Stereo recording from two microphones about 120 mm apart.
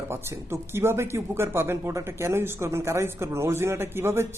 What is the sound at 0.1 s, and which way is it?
Speech, 20° right (ahead or behind).